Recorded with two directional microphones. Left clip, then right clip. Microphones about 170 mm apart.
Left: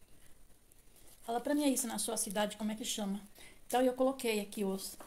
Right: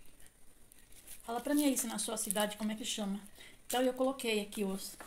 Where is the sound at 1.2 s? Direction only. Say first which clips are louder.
Even; 5° left (ahead or behind).